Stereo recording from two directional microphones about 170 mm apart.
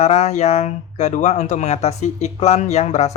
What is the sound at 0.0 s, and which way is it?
Speech, 40° left (ahead or behind).